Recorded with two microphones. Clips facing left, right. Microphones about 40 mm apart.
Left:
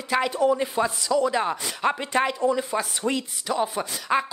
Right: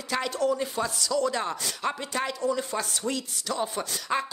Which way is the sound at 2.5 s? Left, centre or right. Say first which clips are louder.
Left 4 dB; centre.